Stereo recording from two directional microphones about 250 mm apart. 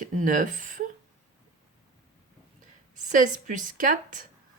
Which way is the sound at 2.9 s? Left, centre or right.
Right.